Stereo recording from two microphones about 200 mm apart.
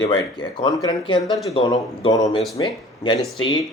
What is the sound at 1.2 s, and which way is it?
Speech, centre (ahead or behind).